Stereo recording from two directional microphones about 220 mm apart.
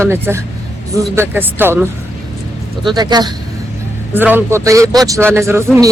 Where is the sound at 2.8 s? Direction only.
20° right (ahead or behind).